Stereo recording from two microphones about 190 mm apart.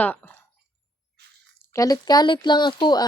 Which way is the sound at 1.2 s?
60° right (ahead or behind).